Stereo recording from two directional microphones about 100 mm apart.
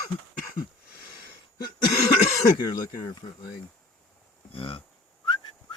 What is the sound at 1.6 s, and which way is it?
Cough, 45° left (ahead or behind).